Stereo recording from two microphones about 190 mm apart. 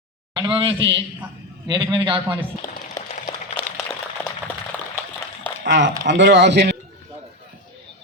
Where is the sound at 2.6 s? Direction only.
20° left (ahead or behind).